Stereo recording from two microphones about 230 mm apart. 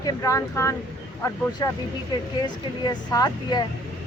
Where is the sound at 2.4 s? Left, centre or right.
Centre.